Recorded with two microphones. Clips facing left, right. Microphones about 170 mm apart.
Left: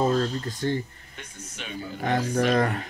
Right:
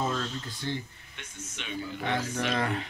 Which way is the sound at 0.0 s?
35° left (ahead or behind).